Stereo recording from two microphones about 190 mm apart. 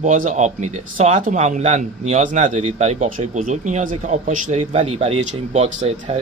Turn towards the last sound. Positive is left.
turn(degrees=-35)  # may be behind; listen again after turning